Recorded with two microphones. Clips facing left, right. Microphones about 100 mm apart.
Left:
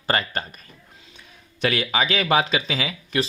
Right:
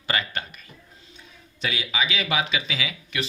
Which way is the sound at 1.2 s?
60° left (ahead or behind).